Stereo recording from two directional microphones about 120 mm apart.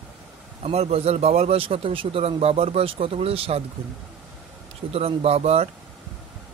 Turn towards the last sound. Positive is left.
turn(degrees=-60)  # may be behind; listen again after turning